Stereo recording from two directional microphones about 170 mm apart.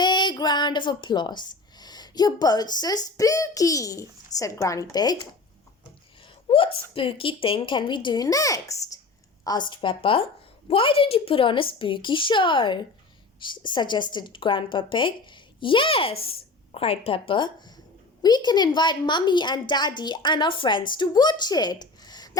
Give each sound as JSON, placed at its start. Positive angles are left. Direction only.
{"t": 0.0, "sound": "a woman's voice", "side_deg": 25}
{"t": 6.5, "sound": "a woman's voice", "side_deg": 30}